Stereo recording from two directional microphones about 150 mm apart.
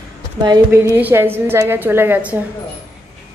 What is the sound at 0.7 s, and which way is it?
A woman's voice, 15° right (ahead or behind).